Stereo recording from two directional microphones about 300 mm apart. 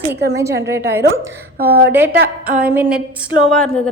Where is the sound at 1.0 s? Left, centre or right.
Right.